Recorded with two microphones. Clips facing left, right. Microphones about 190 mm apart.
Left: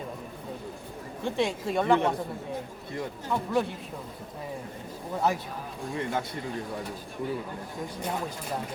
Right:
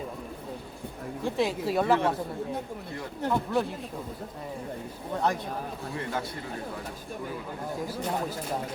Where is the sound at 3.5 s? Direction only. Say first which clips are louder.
Left 1 dB; centre (ahead or behind).